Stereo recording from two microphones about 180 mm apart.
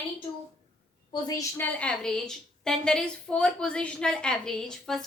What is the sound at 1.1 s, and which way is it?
Speech, 20° left (ahead or behind).